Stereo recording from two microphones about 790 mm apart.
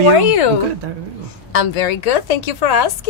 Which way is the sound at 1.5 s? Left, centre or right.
Left.